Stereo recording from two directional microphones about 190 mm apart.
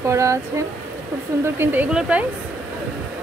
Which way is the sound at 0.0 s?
15° right (ahead or behind).